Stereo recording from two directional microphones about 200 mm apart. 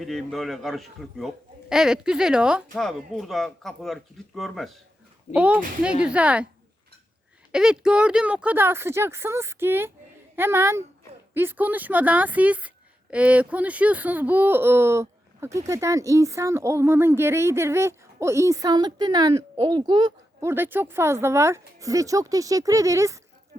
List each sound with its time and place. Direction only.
0.0 s speech: centre (ahead or behind)
7.5 s a woman's voice: 5° right (ahead or behind)